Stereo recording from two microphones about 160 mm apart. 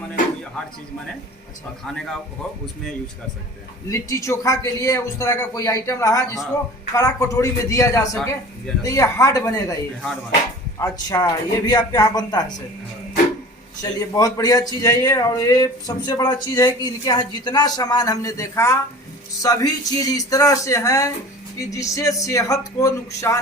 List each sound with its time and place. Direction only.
1.8 s speech: 5° left (ahead or behind)
3.8 s a man's voice: 20° left (ahead or behind)
10.8 s a man's voice: 20° left (ahead or behind)
13.8 s a man's voice: 25° left (ahead or behind)